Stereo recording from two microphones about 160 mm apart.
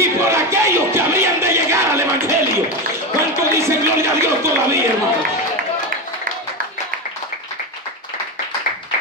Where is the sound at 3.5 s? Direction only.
15° right (ahead or behind).